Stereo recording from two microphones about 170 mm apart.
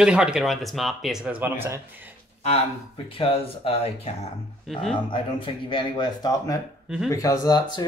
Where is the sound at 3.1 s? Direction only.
35° left (ahead or behind).